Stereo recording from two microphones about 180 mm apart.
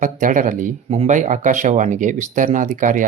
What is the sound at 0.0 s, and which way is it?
Speech, 45° right (ahead or behind).